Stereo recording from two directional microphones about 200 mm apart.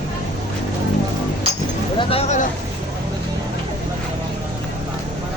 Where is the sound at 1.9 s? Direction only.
30° left (ahead or behind).